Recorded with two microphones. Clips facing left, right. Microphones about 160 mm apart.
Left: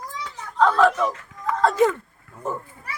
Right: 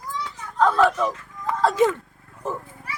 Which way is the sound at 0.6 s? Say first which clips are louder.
Left 1 dB; centre (ahead or behind).